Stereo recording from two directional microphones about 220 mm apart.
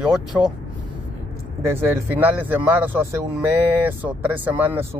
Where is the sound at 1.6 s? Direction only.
10° right (ahead or behind).